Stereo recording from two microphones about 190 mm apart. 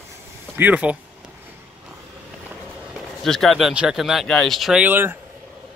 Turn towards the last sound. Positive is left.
turn(degrees=-10)  # may be behind; listen again after turning